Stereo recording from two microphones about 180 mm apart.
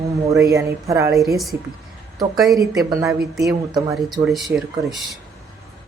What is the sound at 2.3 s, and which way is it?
Speech, centre (ahead or behind).